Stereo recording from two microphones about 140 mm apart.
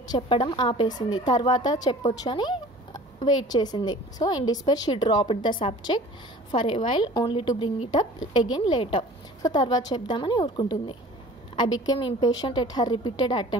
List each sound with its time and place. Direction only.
0.1 s a woman's voice: 35° left (ahead or behind)
2.1 s a sound: 30° left (ahead or behind)
3.3 s a woman's voice: 30° left (ahead or behind)